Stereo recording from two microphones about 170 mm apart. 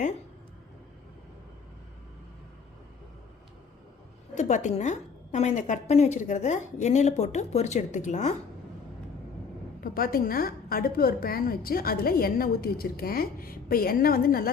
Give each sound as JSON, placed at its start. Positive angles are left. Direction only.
{"t": 4.4, "sound": "a woman's voice", "side_deg": 45}
{"t": 9.8, "sound": "a woman's voice", "side_deg": 60}